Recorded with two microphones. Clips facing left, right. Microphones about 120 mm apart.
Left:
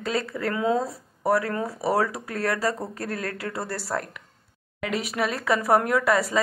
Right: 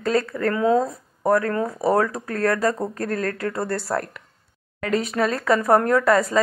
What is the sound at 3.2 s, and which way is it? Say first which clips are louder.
Speech: right 6 dB; 10° left (ahead or behind).